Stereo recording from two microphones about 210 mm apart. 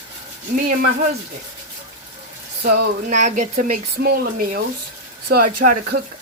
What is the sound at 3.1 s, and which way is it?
Speech, 35° right (ahead or behind).